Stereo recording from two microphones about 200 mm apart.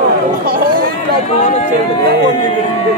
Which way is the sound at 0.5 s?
50° right (ahead or behind).